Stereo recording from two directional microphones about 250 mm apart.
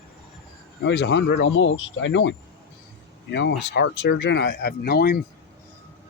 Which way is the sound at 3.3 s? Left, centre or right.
Left.